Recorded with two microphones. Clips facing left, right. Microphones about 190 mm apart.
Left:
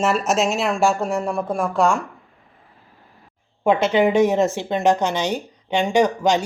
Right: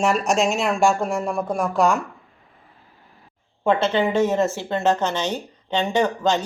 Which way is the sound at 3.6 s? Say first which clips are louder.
Left 3 dB; 15° left (ahead or behind).